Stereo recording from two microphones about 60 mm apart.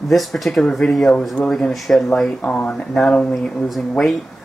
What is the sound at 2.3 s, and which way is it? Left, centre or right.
Speech, left.